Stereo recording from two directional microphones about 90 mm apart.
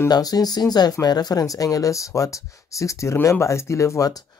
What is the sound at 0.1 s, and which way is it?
Speech, 45° left (ahead or behind).